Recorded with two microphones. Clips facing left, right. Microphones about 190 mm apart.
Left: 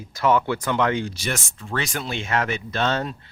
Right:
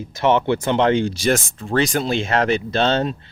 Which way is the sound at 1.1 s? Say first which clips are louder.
Right 10 dB; 90° right.